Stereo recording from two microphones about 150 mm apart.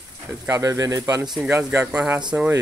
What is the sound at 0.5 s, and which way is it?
Speech, 20° right (ahead or behind).